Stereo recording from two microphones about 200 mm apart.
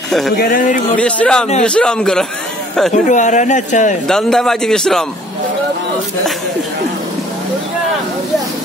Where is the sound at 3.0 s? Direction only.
35° left (ahead or behind).